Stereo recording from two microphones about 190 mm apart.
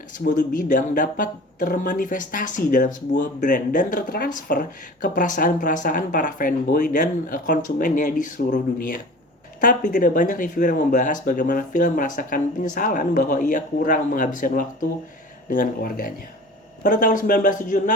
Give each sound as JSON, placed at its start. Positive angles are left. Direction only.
{"t": 0.3, "sound": "speech", "side_deg": 45}